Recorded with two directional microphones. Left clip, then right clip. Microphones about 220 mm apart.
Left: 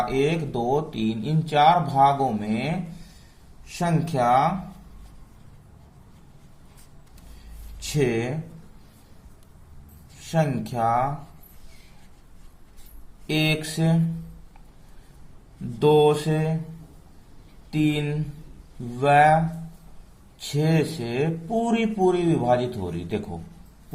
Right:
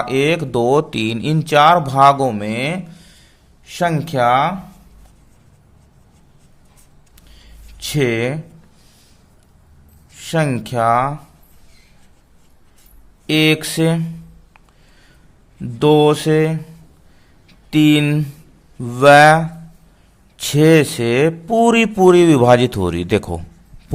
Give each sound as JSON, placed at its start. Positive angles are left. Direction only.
{"t": 0.1, "sound": "speech", "side_deg": -50}
{"t": 7.8, "sound": "speech", "side_deg": -50}
{"t": 10.3, "sound": "speech", "side_deg": -55}
{"t": 13.2, "sound": "speech", "side_deg": -55}
{"t": 15.8, "sound": "speech", "side_deg": -50}
{"t": 17.7, "sound": "speech", "side_deg": -55}
{"t": 20.5, "sound": "speech", "side_deg": -55}